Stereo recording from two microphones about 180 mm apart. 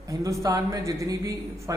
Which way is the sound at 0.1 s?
15° right (ahead or behind).